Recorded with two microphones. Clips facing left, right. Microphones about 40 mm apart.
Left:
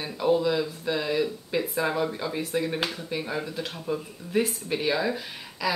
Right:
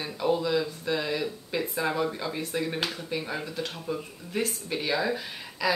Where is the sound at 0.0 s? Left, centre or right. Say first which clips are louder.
Left 3 dB; centre.